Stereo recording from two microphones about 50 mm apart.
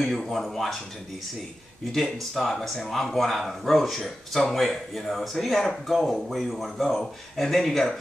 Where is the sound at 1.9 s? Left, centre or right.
Centre.